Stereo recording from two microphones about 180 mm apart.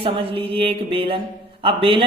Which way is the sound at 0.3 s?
30° right (ahead or behind).